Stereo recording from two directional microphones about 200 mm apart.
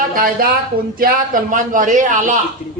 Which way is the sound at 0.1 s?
45° right (ahead or behind).